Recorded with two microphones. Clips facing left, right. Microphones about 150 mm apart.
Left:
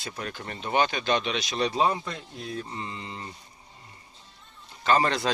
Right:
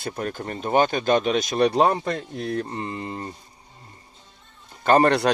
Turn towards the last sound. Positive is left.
turn(degrees=-60)  # may be behind; listen again after turning